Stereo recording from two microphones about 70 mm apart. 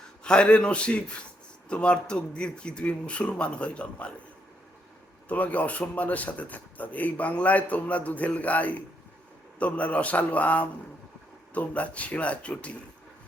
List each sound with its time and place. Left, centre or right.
0.3 s a man's voice: centre
5.3 s speech: left